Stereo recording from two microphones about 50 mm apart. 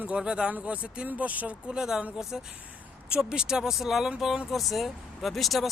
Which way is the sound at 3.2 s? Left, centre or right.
Centre.